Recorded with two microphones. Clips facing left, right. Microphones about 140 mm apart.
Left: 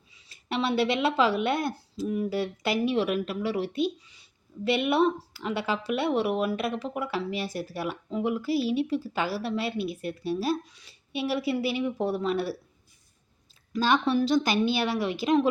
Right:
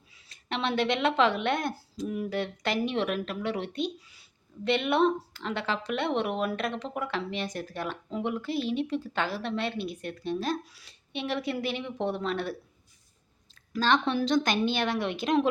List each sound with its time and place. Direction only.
0.1 s a woman's voice: centre (ahead or behind)
13.7 s speech: 5° left (ahead or behind)